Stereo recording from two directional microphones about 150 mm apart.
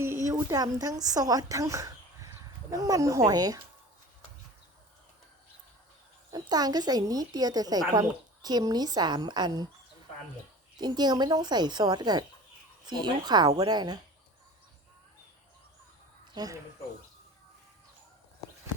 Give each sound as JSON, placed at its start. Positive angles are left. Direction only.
{"t": 0.3, "sound": "speech", "side_deg": -25}
{"t": 6.3, "sound": "a woman's voice", "side_deg": -25}
{"t": 10.8, "sound": "a woman's voice", "side_deg": -30}
{"t": 16.3, "sound": "speech", "side_deg": -25}